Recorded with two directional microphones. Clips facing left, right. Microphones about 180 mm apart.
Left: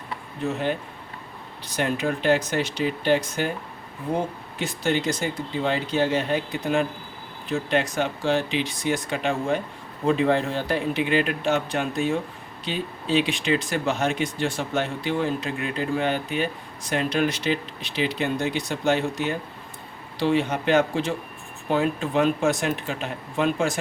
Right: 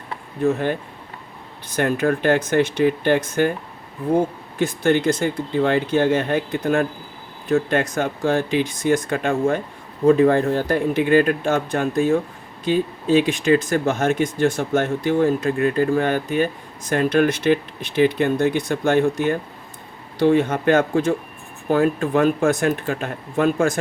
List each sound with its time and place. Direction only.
0.4 s speech: 50° right (ahead or behind)
4.5 s speech: 50° right (ahead or behind)